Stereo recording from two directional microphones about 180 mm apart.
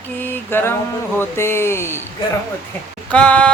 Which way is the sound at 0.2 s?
10° left (ahead or behind).